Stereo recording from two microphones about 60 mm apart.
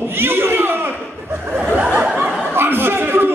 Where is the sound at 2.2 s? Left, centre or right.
Right.